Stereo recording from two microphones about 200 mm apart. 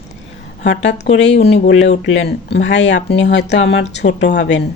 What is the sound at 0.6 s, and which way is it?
Speech, 65° left (ahead or behind).